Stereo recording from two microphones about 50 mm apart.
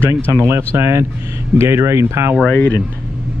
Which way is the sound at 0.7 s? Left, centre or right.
Right.